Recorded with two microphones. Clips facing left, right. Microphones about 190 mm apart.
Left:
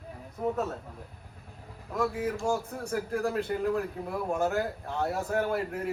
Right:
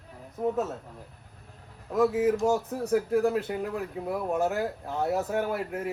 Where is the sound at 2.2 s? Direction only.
20° right (ahead or behind).